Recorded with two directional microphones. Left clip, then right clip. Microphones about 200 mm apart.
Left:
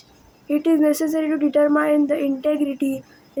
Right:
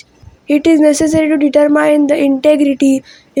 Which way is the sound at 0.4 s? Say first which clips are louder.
Right 9 dB; 40° right (ahead or behind).